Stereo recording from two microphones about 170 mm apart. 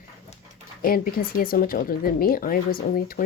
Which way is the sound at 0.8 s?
60° left (ahead or behind).